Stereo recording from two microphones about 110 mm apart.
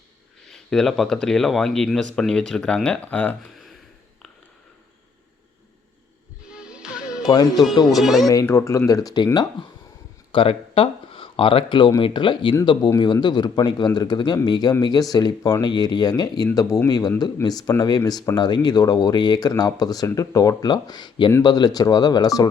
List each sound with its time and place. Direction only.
0.5 s speech: 5° left (ahead or behind)
6.5 s music: 10° right (ahead or behind)
7.2 s speech: 35° left (ahead or behind)
7.5 s speech: centre (ahead or behind)
8.3 s speech: 30° left (ahead or behind)
10.3 s speech: 55° left (ahead or behind); by 22.4 s 35° left (ahead or behind)